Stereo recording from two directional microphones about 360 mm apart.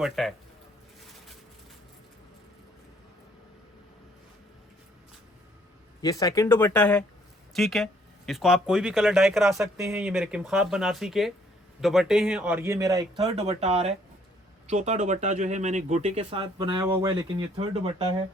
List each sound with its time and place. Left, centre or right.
0.0 s speech: centre
6.0 s speech: centre